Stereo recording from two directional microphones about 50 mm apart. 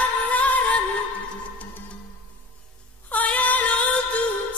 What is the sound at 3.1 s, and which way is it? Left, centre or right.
Female singing, left.